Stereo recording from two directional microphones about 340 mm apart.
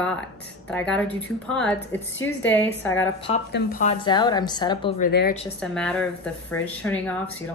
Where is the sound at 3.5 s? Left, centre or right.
Left.